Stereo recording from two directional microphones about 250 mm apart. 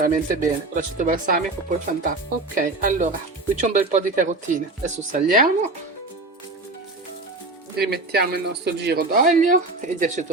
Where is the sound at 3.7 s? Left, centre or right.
Right.